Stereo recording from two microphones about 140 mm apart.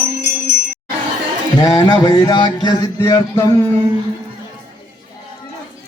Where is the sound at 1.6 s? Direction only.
30° left (ahead or behind).